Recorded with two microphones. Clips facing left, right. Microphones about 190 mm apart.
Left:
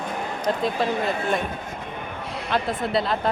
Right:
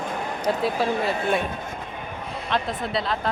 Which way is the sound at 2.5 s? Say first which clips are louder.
Left 3 dB; centre (ahead or behind).